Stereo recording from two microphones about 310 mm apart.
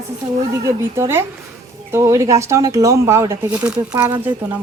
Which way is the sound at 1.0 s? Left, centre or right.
Centre.